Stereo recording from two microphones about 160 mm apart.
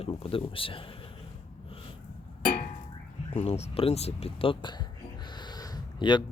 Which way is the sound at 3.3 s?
40° left (ahead or behind).